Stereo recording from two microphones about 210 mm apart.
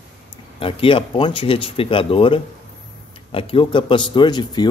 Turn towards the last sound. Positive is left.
turn(degrees=20)  # may be behind; listen again after turning